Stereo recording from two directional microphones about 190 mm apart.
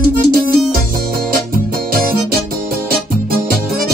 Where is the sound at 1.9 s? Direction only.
50° right (ahead or behind).